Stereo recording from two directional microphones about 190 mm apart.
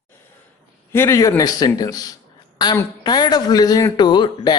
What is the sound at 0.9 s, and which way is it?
A man's voice, 15° left (ahead or behind).